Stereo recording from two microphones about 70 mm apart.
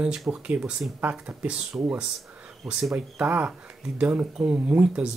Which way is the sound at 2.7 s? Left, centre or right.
Centre.